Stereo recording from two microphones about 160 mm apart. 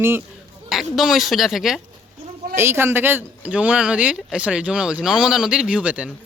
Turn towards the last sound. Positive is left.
turn(degrees=-5)  # may be behind; listen again after turning